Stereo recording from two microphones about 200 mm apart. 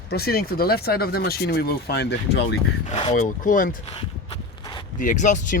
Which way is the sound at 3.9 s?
30° left (ahead or behind).